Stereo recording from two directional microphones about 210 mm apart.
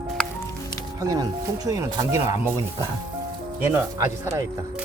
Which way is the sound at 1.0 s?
15° right (ahead or behind).